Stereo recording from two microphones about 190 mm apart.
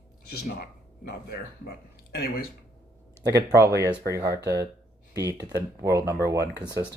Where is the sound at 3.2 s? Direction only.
15° right (ahead or behind).